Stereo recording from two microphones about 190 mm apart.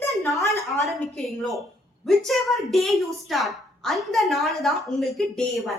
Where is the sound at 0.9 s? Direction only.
Centre (ahead or behind).